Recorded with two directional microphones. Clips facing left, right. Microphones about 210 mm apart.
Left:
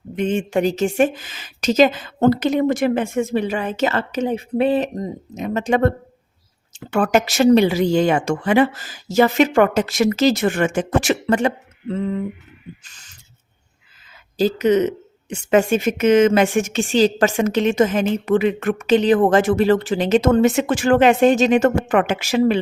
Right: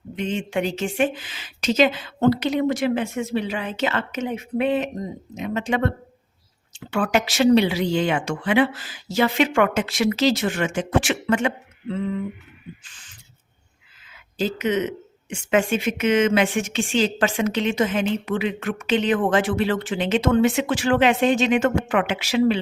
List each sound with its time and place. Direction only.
0.2 s a woman's voice: 50° left (ahead or behind)
12.8 s owl: 40° left (ahead or behind)
14.3 s a woman's voice: 40° left (ahead or behind)